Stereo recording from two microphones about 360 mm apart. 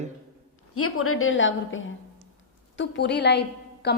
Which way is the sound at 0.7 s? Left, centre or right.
Left.